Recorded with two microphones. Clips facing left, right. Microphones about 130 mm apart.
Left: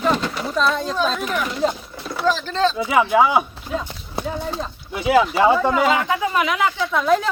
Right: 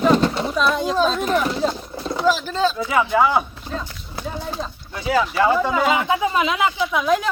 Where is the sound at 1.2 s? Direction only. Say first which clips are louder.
Right 4 dB; 35° right (ahead or behind).